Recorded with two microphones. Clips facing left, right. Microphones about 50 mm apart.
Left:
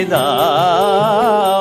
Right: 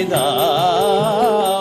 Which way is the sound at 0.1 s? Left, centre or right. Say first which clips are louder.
Left 4 dB; left.